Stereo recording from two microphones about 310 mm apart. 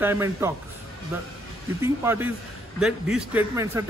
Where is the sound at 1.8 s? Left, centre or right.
Centre.